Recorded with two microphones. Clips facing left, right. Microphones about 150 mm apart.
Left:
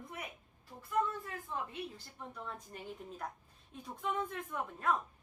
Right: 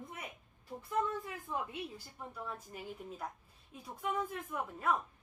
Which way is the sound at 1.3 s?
10° right (ahead or behind).